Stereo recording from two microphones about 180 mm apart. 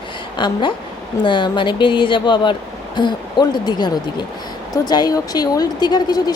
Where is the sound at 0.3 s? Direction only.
25° left (ahead or behind).